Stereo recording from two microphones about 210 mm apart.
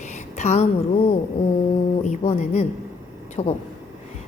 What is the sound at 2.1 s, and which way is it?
A woman's voice, 35° left (ahead or behind).